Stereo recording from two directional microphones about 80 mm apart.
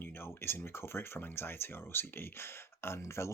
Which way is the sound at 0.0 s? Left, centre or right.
Left.